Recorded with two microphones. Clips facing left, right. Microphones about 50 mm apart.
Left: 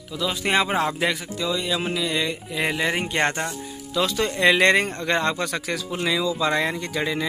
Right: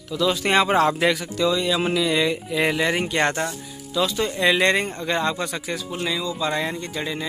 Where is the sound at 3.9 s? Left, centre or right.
Left.